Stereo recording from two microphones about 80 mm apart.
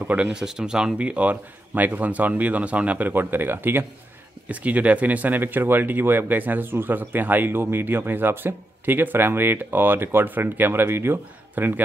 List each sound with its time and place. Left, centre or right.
0.0 s speech: centre